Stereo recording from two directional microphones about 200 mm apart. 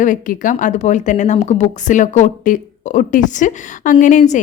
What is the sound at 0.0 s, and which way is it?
A woman's voice, 40° left (ahead or behind).